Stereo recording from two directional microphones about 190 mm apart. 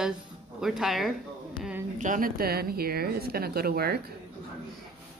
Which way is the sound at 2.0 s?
45° right (ahead or behind).